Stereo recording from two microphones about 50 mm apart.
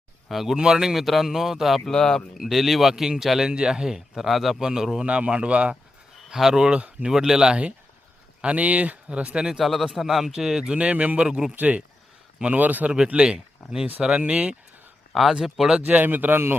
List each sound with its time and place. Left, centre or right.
0.3 s speech: centre
1.8 s speech: centre
2.4 s speech: centre
3.5 s speech: centre
5.0 s speech: right
6.2 s speech: centre
9.5 s speech: centre
11.5 s speech: right
13.1 s speech: centre
15.1 s speech: centre
16.0 s speech: right